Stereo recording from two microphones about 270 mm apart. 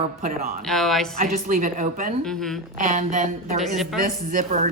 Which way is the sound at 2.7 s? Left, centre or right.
Right.